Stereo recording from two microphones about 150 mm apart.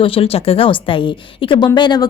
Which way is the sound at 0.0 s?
40° left (ahead or behind).